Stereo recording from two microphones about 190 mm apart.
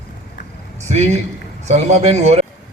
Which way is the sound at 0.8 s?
35° right (ahead or behind).